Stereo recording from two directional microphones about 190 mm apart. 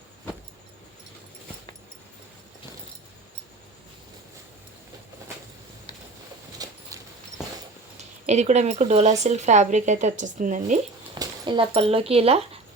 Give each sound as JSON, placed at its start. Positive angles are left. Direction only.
{"t": 6.6, "sound": "horse", "side_deg": -20}
{"t": 7.9, "sound": "speech", "side_deg": -35}
{"t": 11.2, "sound": "speech", "side_deg": -25}